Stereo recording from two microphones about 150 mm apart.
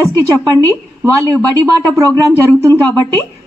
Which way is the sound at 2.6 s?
15° left (ahead or behind).